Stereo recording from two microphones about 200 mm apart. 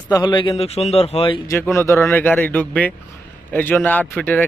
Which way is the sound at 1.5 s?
10° left (ahead or behind).